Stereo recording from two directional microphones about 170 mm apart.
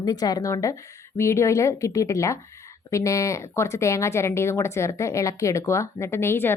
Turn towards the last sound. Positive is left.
turn(degrees=15)  # may be behind; listen again after turning